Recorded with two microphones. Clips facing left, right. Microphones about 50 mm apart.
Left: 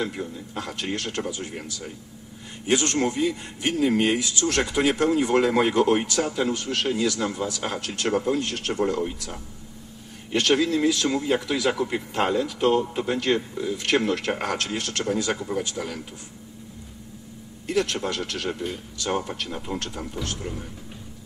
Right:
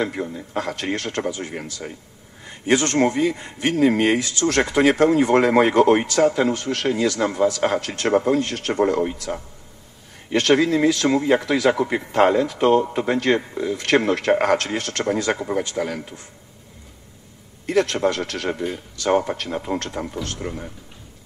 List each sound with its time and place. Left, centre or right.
0.0 s a man's voice: right
17.6 s a man's voice: right